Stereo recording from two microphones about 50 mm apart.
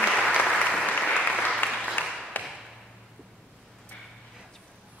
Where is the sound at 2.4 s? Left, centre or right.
Left.